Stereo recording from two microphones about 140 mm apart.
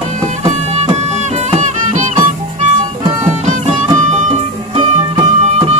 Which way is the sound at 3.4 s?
50° right (ahead or behind).